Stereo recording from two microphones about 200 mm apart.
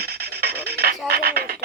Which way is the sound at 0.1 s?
50° right (ahead or behind).